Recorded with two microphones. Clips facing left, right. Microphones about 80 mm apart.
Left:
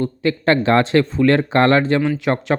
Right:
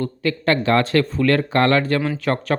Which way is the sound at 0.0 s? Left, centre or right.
Left.